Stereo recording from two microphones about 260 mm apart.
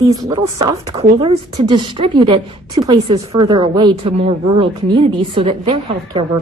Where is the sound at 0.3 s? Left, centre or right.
Centre.